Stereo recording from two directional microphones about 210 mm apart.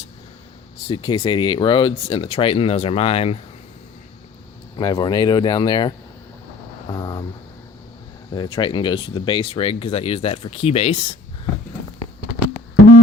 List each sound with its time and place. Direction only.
0.9 s speech: 25° left (ahead or behind)
4.8 s speech: 20° left (ahead or behind)
8.4 s speech: 20° left (ahead or behind)